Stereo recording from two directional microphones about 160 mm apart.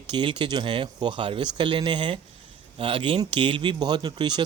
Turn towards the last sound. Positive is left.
turn(degrees=-30)  # may be behind; listen again after turning